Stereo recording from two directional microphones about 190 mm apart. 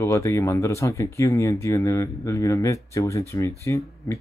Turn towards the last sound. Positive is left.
turn(degrees=15)  # may be behind; listen again after turning